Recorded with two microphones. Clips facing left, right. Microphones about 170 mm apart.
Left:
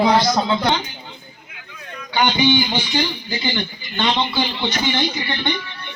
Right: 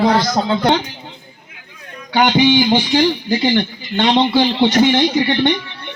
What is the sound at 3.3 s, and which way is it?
A man's voice, 70° right (ahead or behind).